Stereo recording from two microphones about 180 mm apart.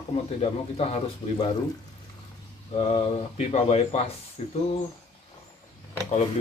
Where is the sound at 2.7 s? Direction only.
35° left (ahead or behind).